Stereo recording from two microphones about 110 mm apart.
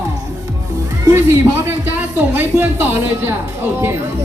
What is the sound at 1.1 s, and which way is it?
A woman's voice, 20° right (ahead or behind).